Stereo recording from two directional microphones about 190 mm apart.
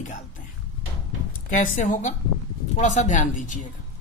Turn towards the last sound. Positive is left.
turn(degrees=40)  # may be behind; listen again after turning